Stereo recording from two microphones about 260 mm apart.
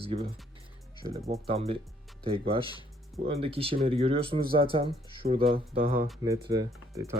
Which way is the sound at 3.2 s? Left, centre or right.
Right.